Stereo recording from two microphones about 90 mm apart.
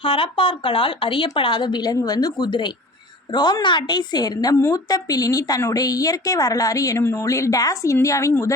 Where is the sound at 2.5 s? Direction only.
60° left (ahead or behind).